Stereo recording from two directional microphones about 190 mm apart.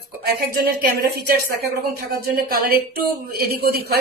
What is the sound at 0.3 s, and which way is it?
Speech, 50° right (ahead or behind).